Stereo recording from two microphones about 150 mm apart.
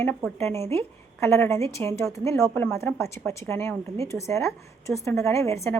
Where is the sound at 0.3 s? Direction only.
15° left (ahead or behind).